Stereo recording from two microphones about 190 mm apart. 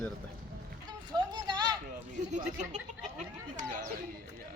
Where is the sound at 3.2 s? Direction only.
40° right (ahead or behind).